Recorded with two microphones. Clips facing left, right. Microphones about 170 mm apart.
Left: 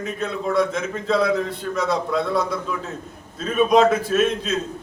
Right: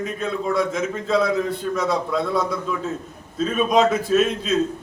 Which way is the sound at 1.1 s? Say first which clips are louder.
Even; centre (ahead or behind).